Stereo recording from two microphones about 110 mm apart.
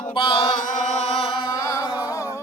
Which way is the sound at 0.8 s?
85° left.